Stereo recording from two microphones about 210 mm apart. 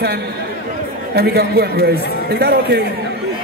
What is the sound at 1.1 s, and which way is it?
A man's voice, 50° right (ahead or behind).